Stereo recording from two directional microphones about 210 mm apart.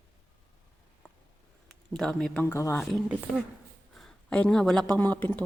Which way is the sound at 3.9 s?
5° left (ahead or behind).